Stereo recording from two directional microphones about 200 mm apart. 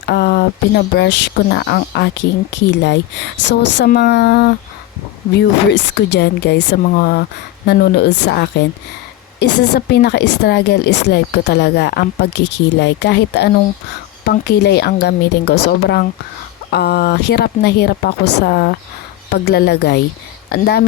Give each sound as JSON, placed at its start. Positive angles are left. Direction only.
{"t": 0.0, "sound": "speech", "side_deg": 55}